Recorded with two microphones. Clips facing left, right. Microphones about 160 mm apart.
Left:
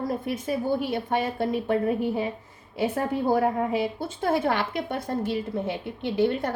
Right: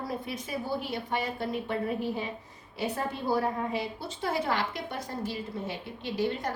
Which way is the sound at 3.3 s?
50° left (ahead or behind).